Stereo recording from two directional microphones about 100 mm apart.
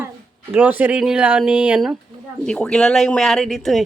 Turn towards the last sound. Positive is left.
turn(degrees=0)  # may be behind; listen again after turning